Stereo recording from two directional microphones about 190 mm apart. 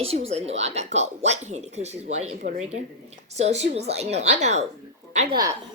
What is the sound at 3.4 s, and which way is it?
A woman's voice, 35° right (ahead or behind).